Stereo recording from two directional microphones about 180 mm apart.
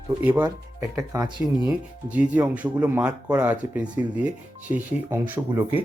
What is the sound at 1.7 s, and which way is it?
Speech, 10° right (ahead or behind).